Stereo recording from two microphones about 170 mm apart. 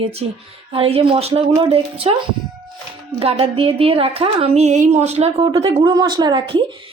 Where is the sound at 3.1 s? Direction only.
35° right (ahead or behind).